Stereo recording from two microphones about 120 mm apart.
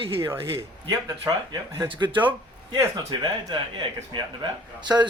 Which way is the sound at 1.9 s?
40° right (ahead or behind).